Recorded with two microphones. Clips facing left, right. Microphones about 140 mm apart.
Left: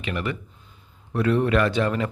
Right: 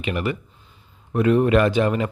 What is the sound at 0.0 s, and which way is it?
Speech, 20° right (ahead or behind).